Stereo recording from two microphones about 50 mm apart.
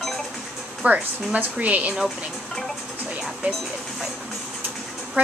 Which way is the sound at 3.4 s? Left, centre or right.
Right.